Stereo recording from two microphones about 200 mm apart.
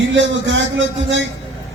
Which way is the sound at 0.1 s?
65° right (ahead or behind).